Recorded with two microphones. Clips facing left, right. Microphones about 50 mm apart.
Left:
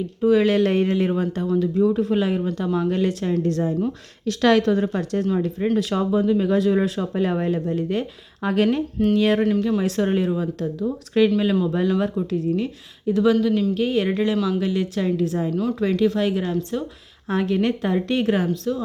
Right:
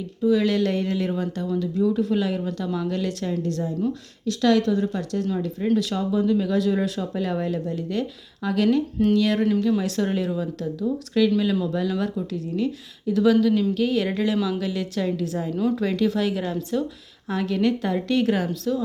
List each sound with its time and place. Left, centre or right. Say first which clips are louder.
0.2 s speech: left 3 dB; left
4.3 s speech: left 2 dB; left
5.7 s a woman's voice: left 1 dB; left
14.3 s speech: left 2 dB; centre
14.6 s a woman's voice: left 3 dB; centre